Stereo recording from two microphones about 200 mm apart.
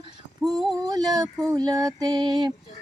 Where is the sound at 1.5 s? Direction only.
20° right (ahead or behind).